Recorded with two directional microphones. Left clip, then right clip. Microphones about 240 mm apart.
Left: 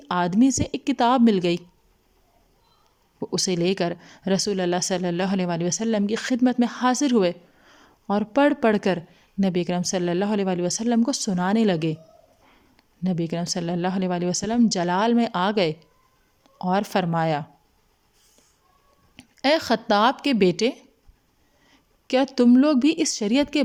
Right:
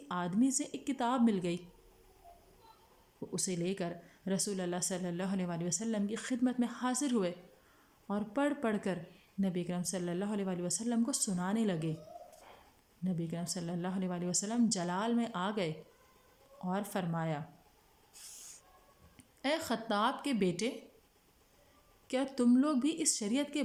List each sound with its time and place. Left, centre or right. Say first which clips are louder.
0.1 s a woman's voice: left 13 dB; left
3.2 s a woman's voice: left 14 dB; left
13.0 s a woman's voice: left 13 dB; left
19.1 s a woman's voice: left 14 dB; left
22.0 s a woman's voice: left 13 dB; left